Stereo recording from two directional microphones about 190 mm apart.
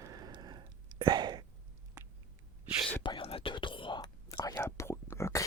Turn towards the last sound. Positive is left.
turn(degrees=15)  # may be behind; listen again after turning